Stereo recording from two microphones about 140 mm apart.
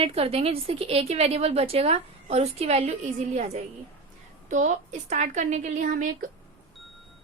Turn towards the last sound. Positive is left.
turn(degrees=-65)  # may be behind; listen again after turning